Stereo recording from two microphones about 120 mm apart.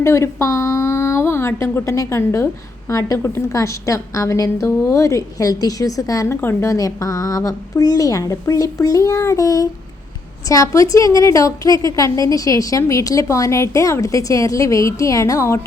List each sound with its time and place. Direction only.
0.0 s a woman's voice: 25° left (ahead or behind)